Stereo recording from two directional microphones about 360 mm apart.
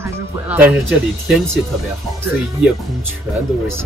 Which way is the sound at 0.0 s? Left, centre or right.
Centre.